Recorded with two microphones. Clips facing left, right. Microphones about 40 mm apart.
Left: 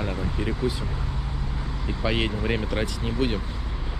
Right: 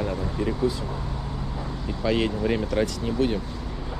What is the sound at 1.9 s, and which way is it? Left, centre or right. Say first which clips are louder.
Speech: right 2 dB; left.